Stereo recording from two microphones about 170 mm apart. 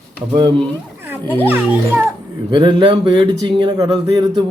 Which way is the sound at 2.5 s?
25° right (ahead or behind).